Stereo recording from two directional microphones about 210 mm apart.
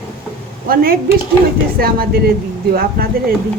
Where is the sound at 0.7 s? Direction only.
45° right (ahead or behind).